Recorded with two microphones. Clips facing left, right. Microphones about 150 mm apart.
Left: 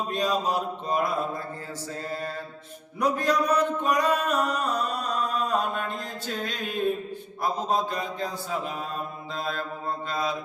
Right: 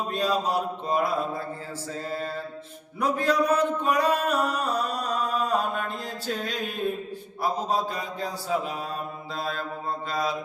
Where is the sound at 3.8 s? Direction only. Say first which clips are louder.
Right 1 dB; 5° right (ahead or behind).